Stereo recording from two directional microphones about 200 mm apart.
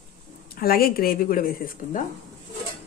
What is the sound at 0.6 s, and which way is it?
Speech, 45° left (ahead or behind).